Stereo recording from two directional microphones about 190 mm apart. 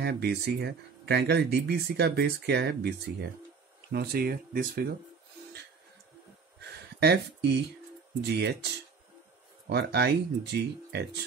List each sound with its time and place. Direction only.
0.0 s speech: 60° right (ahead or behind)
7.0 s speech: 60° right (ahead or behind)
9.7 s speech: 60° right (ahead or behind)